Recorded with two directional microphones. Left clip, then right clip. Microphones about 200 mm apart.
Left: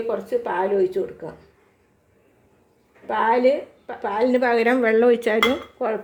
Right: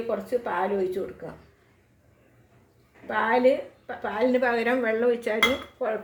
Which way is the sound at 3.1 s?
35° left (ahead or behind).